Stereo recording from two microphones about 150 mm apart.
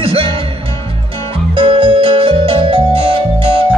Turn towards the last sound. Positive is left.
turn(degrees=-40)  # may be behind; listen again after turning